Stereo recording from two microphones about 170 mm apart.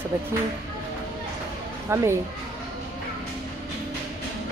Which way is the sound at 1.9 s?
15° right (ahead or behind).